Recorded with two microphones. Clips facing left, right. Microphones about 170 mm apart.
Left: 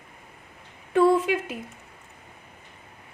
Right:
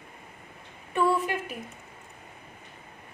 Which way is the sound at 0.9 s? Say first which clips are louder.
Left 6 dB; 90° left.